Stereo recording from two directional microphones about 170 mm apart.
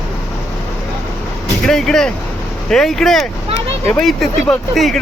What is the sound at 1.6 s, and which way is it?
Speech, 5° left (ahead or behind).